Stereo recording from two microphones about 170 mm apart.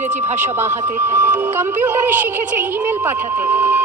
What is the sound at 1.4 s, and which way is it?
Music, 10° right (ahead or behind).